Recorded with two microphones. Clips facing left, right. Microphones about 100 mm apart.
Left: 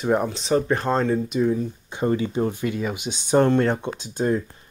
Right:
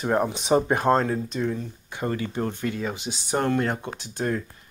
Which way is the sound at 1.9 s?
20° left (ahead or behind).